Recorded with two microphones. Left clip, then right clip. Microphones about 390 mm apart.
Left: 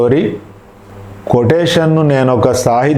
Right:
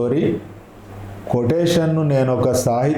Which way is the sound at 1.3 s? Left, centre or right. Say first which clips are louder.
Left 7 dB; left.